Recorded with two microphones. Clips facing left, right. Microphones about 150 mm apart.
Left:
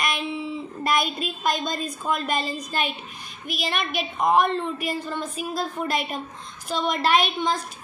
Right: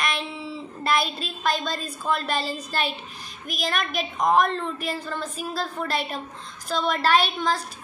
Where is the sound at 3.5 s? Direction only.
40° right (ahead or behind).